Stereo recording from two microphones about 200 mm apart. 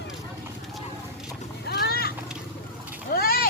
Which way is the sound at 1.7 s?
50° left (ahead or behind).